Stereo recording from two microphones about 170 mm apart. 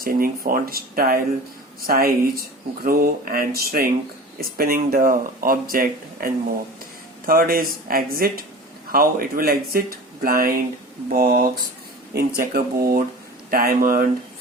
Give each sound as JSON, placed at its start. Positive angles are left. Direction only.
{"t": 0.0, "sound": "speech", "side_deg": -55}